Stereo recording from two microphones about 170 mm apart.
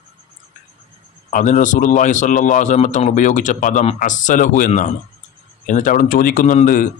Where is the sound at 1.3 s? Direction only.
50° left (ahead or behind).